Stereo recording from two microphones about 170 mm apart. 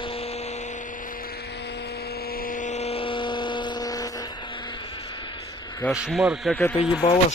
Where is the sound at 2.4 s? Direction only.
50° left (ahead or behind); by 4.1 s 20° left (ahead or behind).